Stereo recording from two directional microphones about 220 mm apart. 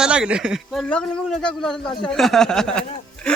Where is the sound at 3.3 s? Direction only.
5° left (ahead or behind).